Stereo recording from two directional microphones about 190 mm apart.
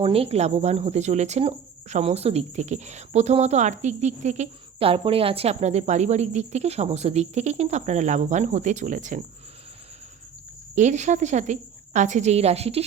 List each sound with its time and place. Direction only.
0.0 s a woman's voice: 30° right (ahead or behind)
10.8 s a woman's voice: 40° right (ahead or behind)